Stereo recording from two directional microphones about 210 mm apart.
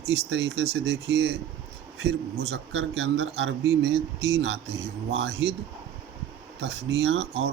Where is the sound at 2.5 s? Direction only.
55° right (ahead or behind).